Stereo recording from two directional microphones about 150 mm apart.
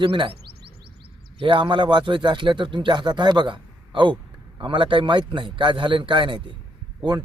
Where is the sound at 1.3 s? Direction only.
35° right (ahead or behind).